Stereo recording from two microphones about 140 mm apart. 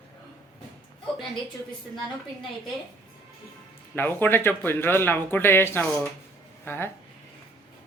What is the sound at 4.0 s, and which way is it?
Speech, 15° left (ahead or behind).